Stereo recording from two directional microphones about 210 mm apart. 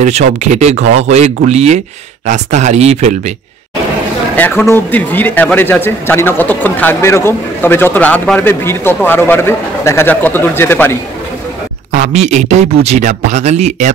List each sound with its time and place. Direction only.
0.4 s speech: 30° right (ahead or behind)
4.4 s a man's voice: 10° left (ahead or behind)
11.9 s speech: 35° right (ahead or behind)